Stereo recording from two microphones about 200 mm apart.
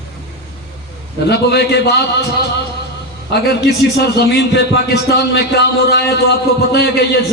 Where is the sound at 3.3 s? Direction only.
55° left (ahead or behind).